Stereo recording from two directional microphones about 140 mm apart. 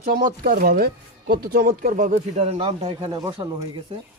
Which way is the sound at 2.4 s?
45° right (ahead or behind).